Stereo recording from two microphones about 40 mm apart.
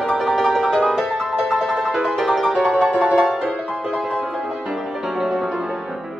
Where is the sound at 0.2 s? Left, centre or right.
Centre.